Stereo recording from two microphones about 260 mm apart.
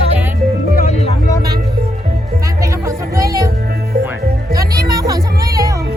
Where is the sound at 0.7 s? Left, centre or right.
Left.